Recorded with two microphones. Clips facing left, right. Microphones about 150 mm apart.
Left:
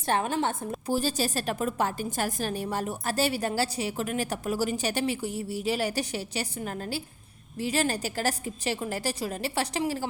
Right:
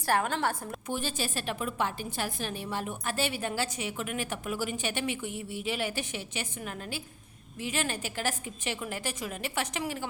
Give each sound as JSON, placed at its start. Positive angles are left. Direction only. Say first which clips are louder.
{"t": 0.0, "sound": "a woman's voice", "louder": "left 2 dB", "side_deg": 20}
{"t": 0.9, "sound": "a woman's voice", "louder": "left 6 dB", "side_deg": 35}